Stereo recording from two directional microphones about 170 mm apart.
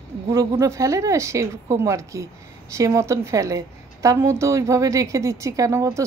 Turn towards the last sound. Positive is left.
turn(degrees=-15)  # may be behind; listen again after turning